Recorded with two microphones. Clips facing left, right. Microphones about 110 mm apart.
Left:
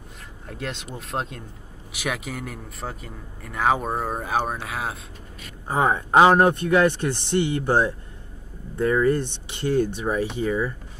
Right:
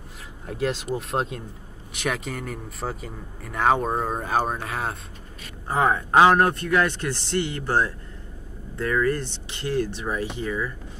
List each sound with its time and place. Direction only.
0.5 s a man's voice: centre (ahead or behind)
5.7 s a man's voice: 15° left (ahead or behind)